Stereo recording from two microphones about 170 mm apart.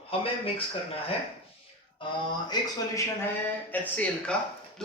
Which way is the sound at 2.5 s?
25° left (ahead or behind).